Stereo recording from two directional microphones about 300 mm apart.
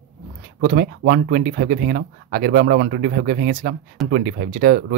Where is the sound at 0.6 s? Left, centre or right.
Right.